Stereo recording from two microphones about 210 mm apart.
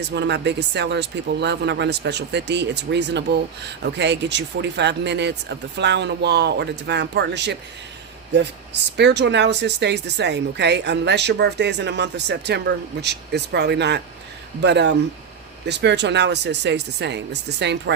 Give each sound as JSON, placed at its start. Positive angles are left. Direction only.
{"t": 0.0, "sound": "speech", "side_deg": -55}
{"t": 9.0, "sound": "speech", "side_deg": -55}